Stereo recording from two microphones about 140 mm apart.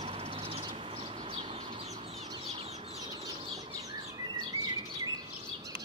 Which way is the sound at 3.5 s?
25° right (ahead or behind).